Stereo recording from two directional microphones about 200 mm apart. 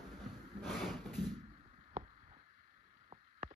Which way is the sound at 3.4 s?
35° right (ahead or behind).